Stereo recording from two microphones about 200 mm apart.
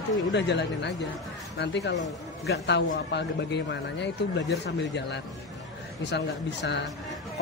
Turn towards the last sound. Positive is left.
turn(degrees=60)  # may be behind; listen again after turning